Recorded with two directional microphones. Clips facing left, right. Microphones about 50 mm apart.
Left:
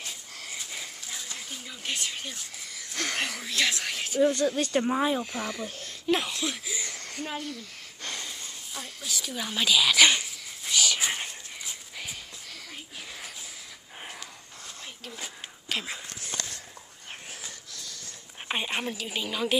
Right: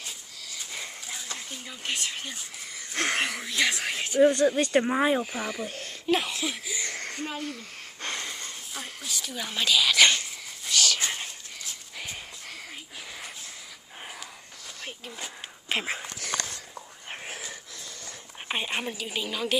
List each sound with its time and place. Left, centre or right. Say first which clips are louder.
2.0 s speech: right 1 dB; centre
3.2 s speech: right 2 dB; centre
5.2 s speech: right 1 dB; centre
6.9 s a sound: right 2 dB; right
8.7 s speech: left 1 dB; centre
10.6 s whispering: even; centre
15.0 s speech: left 2 dB; centre
15.7 s speech: right 4 dB; right
18.5 s speech: even; centre